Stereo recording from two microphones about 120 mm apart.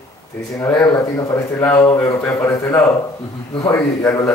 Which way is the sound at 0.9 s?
30° left (ahead or behind).